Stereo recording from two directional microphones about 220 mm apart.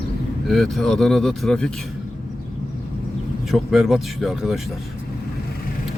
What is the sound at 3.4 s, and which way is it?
Speech, centre (ahead or behind).